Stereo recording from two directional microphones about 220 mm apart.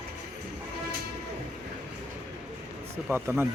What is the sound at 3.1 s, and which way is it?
Speech, 10° right (ahead or behind).